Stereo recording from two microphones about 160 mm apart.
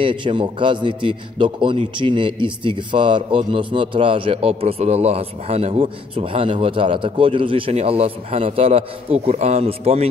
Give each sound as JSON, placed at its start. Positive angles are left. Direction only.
{"t": 0.0, "sound": "a man's voice", "side_deg": -30}